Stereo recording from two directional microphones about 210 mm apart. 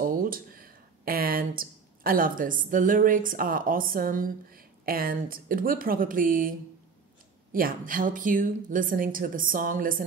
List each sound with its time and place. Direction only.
0.0 s speech: 45° right (ahead or behind)
7.5 s a woman's voice: 40° right (ahead or behind)